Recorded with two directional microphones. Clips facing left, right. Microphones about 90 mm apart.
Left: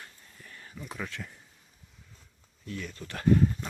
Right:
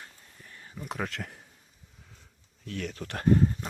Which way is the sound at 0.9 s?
65° right (ahead or behind).